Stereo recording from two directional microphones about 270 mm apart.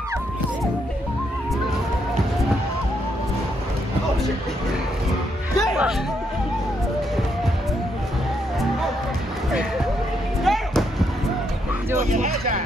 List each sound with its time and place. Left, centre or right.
5.6 s music: centre
10.4 s a sound: centre
12.0 s speech: right